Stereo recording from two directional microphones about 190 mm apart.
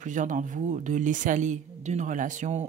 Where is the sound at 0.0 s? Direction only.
40° right (ahead or behind).